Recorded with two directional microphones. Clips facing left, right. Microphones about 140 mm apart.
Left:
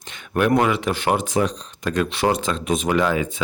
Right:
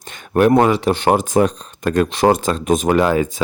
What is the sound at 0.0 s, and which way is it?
Speech, 45° right (ahead or behind).